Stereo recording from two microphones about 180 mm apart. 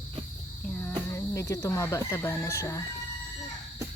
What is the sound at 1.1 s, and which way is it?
Speech, 15° left (ahead or behind).